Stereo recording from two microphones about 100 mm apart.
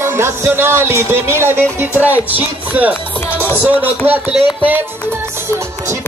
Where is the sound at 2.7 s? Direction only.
15° right (ahead or behind).